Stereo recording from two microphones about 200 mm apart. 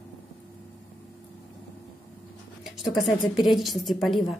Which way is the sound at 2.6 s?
Centre (ahead or behind).